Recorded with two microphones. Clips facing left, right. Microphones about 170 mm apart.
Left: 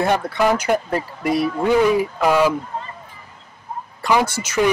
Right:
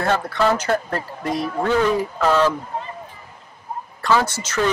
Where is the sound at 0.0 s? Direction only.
15° left (ahead or behind).